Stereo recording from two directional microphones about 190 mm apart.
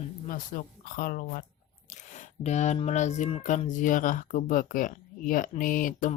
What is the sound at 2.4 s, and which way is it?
Speech, 35° left (ahead or behind).